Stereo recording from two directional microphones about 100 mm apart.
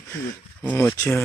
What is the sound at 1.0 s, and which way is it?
Speech, 25° left (ahead or behind).